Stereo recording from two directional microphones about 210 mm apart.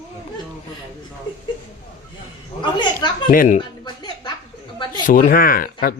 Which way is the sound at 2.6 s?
20° left (ahead or behind).